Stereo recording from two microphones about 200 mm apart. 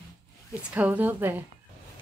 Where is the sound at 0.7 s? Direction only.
10° right (ahead or behind).